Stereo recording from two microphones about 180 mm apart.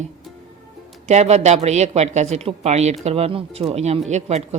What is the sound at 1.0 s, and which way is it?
Speech, 35° right (ahead or behind).